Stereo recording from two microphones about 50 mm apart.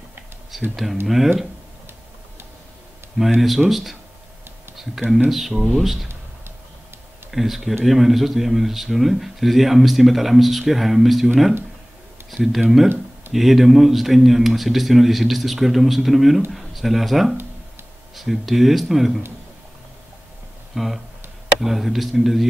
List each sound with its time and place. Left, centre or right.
0.5 s speech: centre
3.3 s speech: centre
5.3 s speech: centre
7.2 s speech: centre
12.3 s speech: centre
20.7 s speech: centre